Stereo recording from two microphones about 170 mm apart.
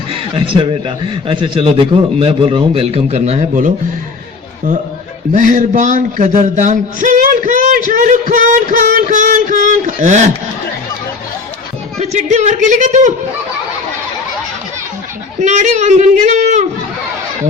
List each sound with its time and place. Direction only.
0.1 s a man's voice: 30° right (ahead or behind)
5.3 s speech: 50° right (ahead or behind)
11.9 s speech: 40° right (ahead or behind)
15.4 s speech: 45° right (ahead or behind)